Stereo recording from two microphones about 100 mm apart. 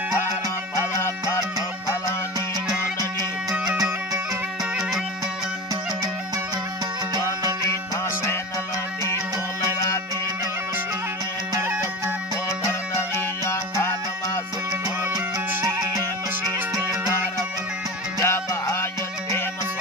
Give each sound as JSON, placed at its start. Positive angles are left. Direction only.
{"t": 0.7, "sound": "music", "side_deg": 30}
{"t": 3.0, "sound": "music", "side_deg": -35}
{"t": 13.5, "sound": "music", "side_deg": 25}
{"t": 14.7, "sound": "music", "side_deg": -40}
{"t": 18.2, "sound": "music", "side_deg": 25}